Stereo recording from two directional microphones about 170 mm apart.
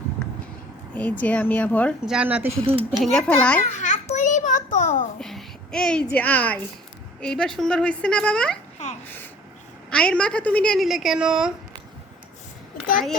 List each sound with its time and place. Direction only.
0.9 s speech: 10° left (ahead or behind)
2.0 s speech: 5° right (ahead or behind)
2.5 s speech: 30° right (ahead or behind)
3.0 s a woman's voice: 5° left (ahead or behind)
3.7 s babbling: 45° left (ahead or behind)
4.1 s a sound: 45° left (ahead or behind)
5.2 s a sound: centre (ahead or behind)
6.1 s a woman's voice: 10° left (ahead or behind)